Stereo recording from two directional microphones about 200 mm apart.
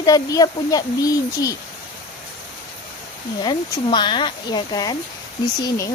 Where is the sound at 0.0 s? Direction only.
20° left (ahead or behind).